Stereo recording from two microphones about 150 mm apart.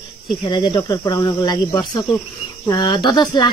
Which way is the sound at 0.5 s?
30° left (ahead or behind).